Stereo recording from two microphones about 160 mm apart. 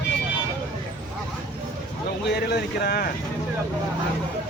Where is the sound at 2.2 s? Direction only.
90° left.